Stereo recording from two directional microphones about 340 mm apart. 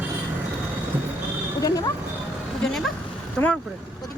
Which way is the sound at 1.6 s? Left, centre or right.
Centre.